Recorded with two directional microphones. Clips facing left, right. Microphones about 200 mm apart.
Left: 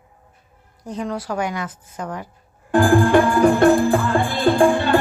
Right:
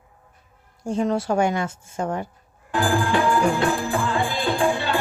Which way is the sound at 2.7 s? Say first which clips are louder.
Left 7 dB; 50° left (ahead or behind).